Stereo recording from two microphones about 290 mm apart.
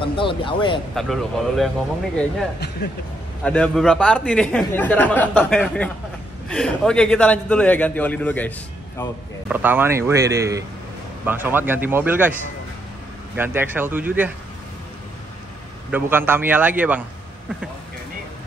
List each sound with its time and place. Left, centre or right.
0.0 s speech: centre
0.9 s a man's voice: centre
3.4 s a man's voice: centre
9.5 s speech: centre
13.4 s speech: centre
15.9 s a man's voice: centre